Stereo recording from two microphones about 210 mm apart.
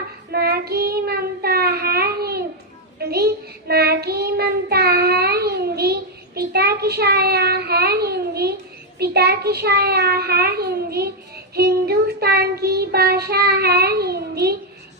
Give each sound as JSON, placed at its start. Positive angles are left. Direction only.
{"t": 0.3, "sound": "child singing", "side_deg": -50}